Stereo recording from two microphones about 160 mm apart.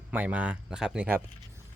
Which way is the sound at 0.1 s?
10° right (ahead or behind).